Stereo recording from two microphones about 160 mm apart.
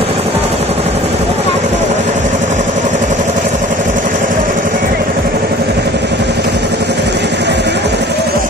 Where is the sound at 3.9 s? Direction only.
55° right (ahead or behind); by 8.2 s 90° right.